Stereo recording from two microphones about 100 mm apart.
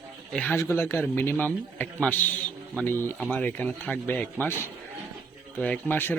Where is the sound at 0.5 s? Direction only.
25° left (ahead or behind).